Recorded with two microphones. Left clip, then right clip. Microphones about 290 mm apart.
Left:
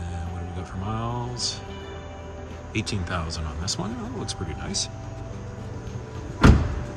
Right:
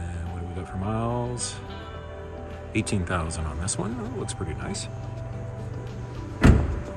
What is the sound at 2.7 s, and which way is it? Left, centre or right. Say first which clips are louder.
Speech: right 2 dB; centre.